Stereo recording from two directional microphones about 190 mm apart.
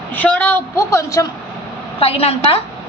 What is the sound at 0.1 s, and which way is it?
A woman's voice, 10° left (ahead or behind).